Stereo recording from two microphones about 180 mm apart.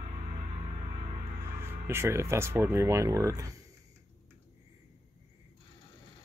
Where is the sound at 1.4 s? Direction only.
15° right (ahead or behind).